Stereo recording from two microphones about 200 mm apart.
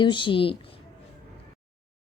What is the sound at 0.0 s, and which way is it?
Speech, 25° left (ahead or behind).